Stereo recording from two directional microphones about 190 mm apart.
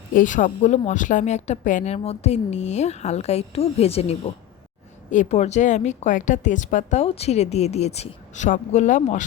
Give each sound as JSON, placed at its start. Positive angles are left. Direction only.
{"t": 0.1, "sound": "a woman's voice", "side_deg": 45}